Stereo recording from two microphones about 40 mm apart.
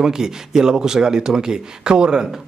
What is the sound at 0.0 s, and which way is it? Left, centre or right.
Speech, centre.